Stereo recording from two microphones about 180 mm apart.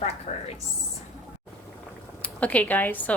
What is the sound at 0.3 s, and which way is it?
Speech, 35° left (ahead or behind).